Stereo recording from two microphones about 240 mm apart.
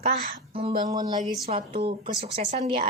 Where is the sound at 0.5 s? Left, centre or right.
Right.